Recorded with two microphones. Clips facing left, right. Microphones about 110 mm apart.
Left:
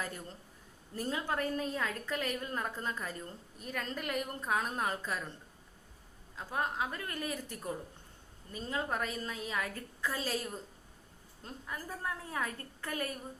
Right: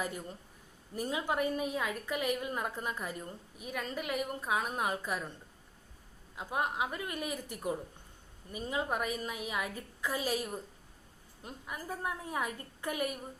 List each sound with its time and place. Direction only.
0.0 s a woman's voice: 15° right (ahead or behind)
6.3 s a woman's voice: 15° right (ahead or behind)